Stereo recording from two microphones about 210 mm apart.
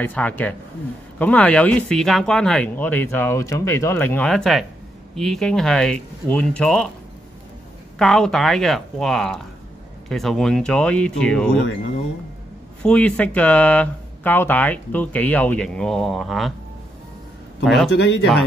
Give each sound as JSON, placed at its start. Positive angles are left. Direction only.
{"t": 0.0, "sound": "speech", "side_deg": 5}
{"t": 8.0, "sound": "speech", "side_deg": 0}
{"t": 12.8, "sound": "speech", "side_deg": 5}
{"t": 17.6, "sound": "speech", "side_deg": 0}
{"t": 17.9, "sound": "speech", "side_deg": 55}